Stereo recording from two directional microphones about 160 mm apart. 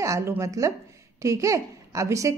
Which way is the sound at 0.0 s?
20° right (ahead or behind).